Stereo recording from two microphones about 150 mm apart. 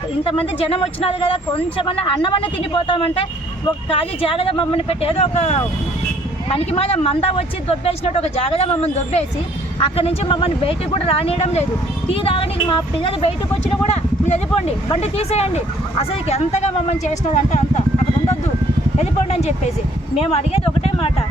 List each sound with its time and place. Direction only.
0.3 s speech: 40° left (ahead or behind)
18.9 s speech: 50° left (ahead or behind)